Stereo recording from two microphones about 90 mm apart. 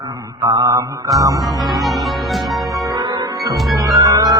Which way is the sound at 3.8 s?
40° right (ahead or behind).